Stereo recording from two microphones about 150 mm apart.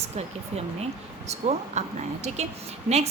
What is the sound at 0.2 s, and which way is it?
A woman's voice, 45° right (ahead or behind).